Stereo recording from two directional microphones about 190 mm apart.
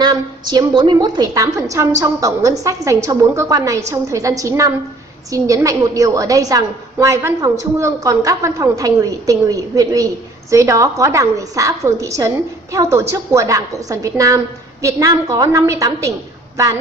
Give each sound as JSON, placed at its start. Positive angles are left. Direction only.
{"t": 0.0, "sound": "a woman's voice", "side_deg": -20}